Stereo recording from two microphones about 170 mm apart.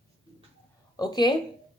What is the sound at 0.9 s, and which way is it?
Speech, 25° left (ahead or behind).